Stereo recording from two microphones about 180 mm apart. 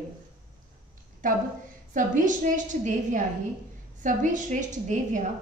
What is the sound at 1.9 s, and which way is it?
A woman's voice, 45° right (ahead or behind).